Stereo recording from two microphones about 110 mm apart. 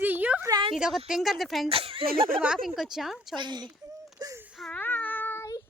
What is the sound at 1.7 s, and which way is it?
Speech, 55° right (ahead or behind).